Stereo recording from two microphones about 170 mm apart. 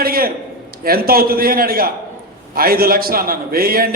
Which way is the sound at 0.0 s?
60° right (ahead or behind).